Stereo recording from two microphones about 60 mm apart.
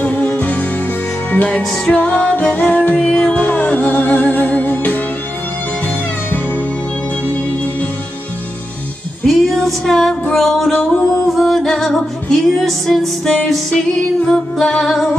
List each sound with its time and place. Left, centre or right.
0.0 s music: left
2.0 s music: left
9.2 s female singing: centre
10.3 s music: centre
10.7 s music: centre
11.3 s music: centre